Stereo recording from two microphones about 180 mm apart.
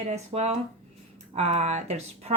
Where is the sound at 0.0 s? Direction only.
40° right (ahead or behind).